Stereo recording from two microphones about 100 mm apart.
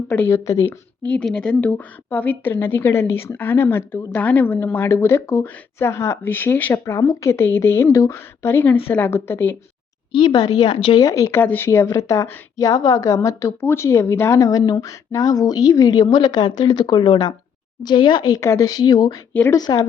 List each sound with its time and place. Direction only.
0.1 s a woman's voice: 20° left (ahead or behind)
1.0 s a woman's voice: 10° left (ahead or behind)
6.8 s a woman's voice: 35° left (ahead or behind)
10.1 s a woman's voice: 55° left (ahead or behind)
11.0 s a woman's voice: 35° left (ahead or behind)
11.3 s a woman's voice: 20° left (ahead or behind); by 18.3 s 50° left (ahead or behind)
18.3 s a woman's voice: 30° left (ahead or behind)
18.8 s a woman's voice: 45° left (ahead or behind)